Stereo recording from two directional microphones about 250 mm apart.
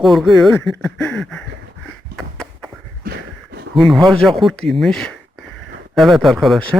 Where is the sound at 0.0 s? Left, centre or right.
Centre.